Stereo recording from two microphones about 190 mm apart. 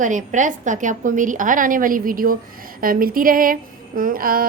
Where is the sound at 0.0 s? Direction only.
40° right (ahead or behind).